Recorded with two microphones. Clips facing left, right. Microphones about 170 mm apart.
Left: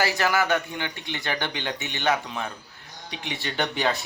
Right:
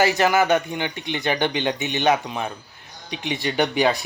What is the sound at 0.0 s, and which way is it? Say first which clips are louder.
Speech: right 5 dB; 20° right (ahead or behind).